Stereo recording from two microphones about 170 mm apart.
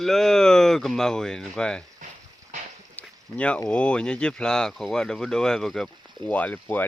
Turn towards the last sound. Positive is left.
turn(degrees=10)  # may be behind; listen again after turning